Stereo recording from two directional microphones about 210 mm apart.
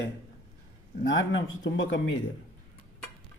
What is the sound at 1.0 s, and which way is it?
Speech, 65° left (ahead or behind).